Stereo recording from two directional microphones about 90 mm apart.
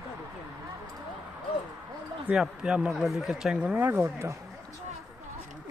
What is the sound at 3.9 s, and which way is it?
Speech, 30° right (ahead or behind).